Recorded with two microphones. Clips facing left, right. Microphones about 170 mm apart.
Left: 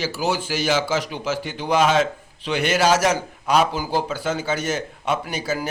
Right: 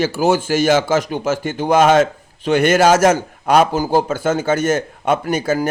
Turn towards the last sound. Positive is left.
turn(degrees=-50)  # may be behind; listen again after turning